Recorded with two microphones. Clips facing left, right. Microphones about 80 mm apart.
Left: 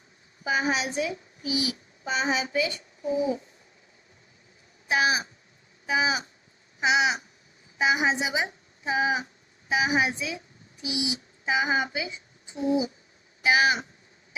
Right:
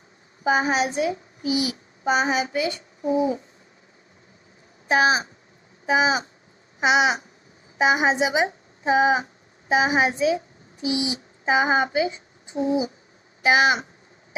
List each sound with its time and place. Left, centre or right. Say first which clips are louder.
0.4 s a child's voice: right 5 dB; right
4.9 s a woman's voice: right 5 dB; right
6.7 s a sound: right 4 dB; right
7.8 s a woman's voice: right 5 dB; right
13.4 s a woman's voice: right 4 dB; right